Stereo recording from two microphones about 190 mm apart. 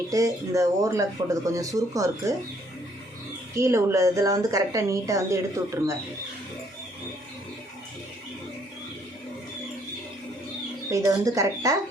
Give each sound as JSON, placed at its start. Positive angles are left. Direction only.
{"t": 0.1, "sound": "speech", "side_deg": -15}
{"t": 3.5, "sound": "speech", "side_deg": -15}
{"t": 10.9, "sound": "speech", "side_deg": -15}